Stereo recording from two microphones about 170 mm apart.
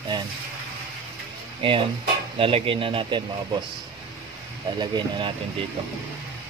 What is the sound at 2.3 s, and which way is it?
Speech, 30° right (ahead or behind).